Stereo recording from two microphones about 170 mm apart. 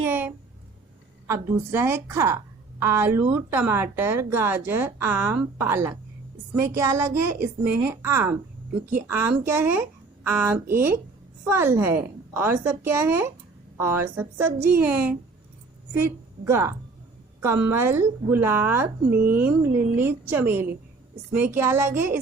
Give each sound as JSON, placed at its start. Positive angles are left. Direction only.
{"t": 0.0, "sound": "a sound", "side_deg": -10}
{"t": 1.3, "sound": "a woman's voice", "side_deg": -15}
{"t": 9.4, "sound": "a woman's voice", "side_deg": -10}